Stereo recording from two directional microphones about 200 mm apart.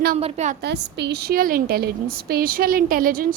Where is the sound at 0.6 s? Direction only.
60° right (ahead or behind).